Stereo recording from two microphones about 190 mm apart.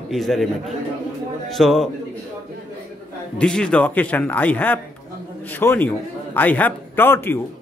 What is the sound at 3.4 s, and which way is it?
A man's voice, 5° left (ahead or behind).